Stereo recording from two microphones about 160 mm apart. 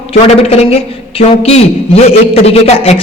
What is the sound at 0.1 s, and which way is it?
Speech, 40° left (ahead or behind).